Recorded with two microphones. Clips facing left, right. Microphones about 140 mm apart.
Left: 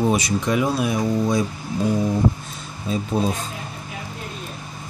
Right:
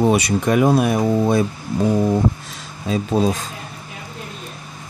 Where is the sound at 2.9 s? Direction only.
90° right.